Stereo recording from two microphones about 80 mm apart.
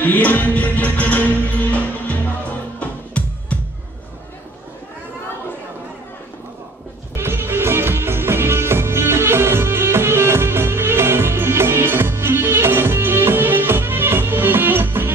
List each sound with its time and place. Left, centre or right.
0.0 s music: left
7.2 s music: right